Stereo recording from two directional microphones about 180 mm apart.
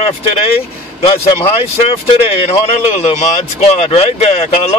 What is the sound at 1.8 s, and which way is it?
Speech, 30° left (ahead or behind).